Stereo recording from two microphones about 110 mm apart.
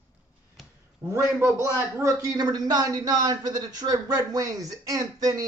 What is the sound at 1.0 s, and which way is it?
A man's voice, 25° right (ahead or behind).